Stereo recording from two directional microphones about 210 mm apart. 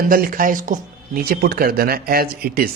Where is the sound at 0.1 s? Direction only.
40° right (ahead or behind).